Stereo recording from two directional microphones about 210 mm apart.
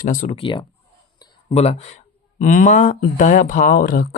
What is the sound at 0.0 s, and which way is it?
Speech, 40° left (ahead or behind).